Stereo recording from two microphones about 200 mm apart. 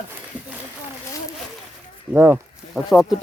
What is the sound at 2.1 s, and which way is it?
Speech, 10° right (ahead or behind).